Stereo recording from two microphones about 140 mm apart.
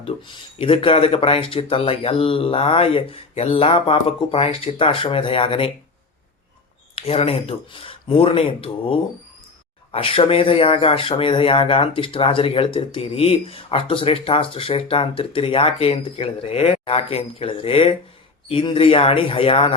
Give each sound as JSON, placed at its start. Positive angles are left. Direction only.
{"t": 0.0, "sound": "speech", "side_deg": 40}
{"t": 6.9, "sound": "speech", "side_deg": 45}